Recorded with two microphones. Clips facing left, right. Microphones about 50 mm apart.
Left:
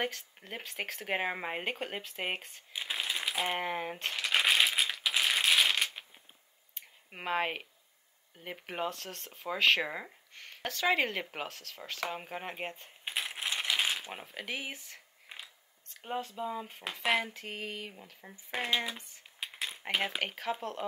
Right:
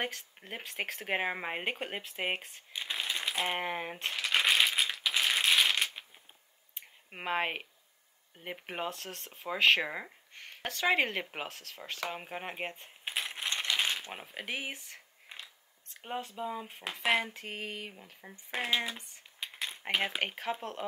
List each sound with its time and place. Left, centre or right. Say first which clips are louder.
0.1 s speech: even; centre
2.7 s a sound: even; centre
3.5 s a sound: left 1 dB; centre
7.1 s speech: even; centre
10.3 s speech: even; centre
11.7 s speech: left 1 dB; centre
13.0 s coin: even; centre
14.2 s speech: right 1 dB; centre
15.2 s a sound: even; centre
16.3 s speech: left 1 dB; centre
17.4 s speech: even; centre
18.5 s speech: even; centre
19.4 s a sound: even; centre
20.2 s speech: even; centre